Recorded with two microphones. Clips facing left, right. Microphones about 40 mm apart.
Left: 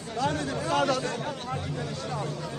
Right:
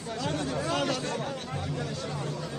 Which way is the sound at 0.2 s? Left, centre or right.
Left.